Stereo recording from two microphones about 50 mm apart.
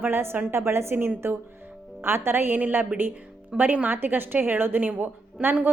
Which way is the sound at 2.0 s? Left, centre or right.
Right.